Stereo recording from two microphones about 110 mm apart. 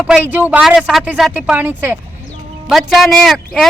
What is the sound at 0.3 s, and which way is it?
Speech, 15° right (ahead or behind).